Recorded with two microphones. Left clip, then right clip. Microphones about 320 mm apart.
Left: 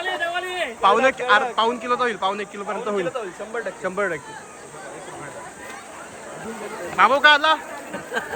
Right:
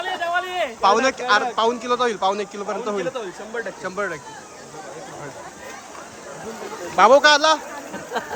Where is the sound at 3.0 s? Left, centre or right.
Right.